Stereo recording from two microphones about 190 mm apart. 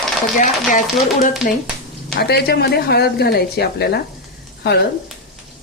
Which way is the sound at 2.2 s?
60° left (ahead or behind).